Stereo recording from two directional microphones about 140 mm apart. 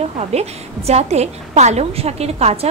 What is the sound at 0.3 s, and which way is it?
A woman's voice, 50° right (ahead or behind).